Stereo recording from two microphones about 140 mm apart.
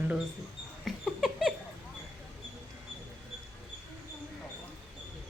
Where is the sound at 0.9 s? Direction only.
Centre (ahead or behind).